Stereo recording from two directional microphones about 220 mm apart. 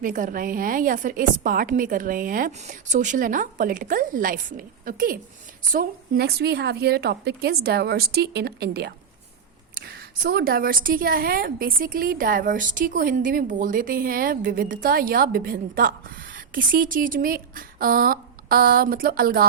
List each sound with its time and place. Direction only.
0.0 s a woman's voice: 35° right (ahead or behind)